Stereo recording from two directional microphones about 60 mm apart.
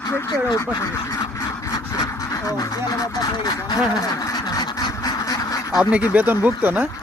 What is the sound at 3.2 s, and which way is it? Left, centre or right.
Speech, left.